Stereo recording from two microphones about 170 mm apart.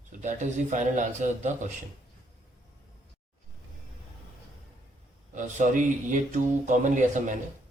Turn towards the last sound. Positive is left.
turn(degrees=-50)  # may be behind; listen again after turning